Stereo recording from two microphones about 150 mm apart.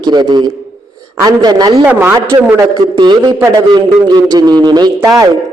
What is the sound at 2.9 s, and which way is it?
A man's voice, 30° right (ahead or behind).